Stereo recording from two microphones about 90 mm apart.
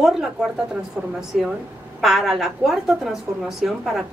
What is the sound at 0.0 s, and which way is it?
A woman's voice, 5° right (ahead or behind).